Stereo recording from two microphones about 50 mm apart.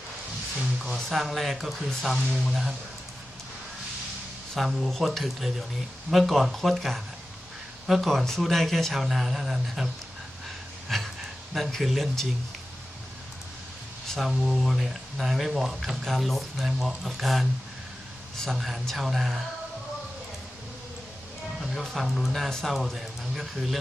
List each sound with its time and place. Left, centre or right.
0.9 s speech: centre
4.5 s speech: centre
8.0 s speech: centre
10.8 s a sound: centre
11.8 s speech: centre
14.2 s speech: centre
21.6 s speech: centre